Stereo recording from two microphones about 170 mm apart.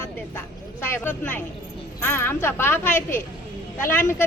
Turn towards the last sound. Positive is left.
turn(degrees=15)  # may be behind; listen again after turning